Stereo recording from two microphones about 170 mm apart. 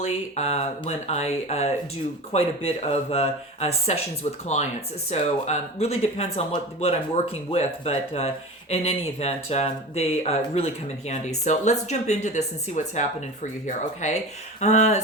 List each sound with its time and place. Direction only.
0.0 s speech: 40° left (ahead or behind)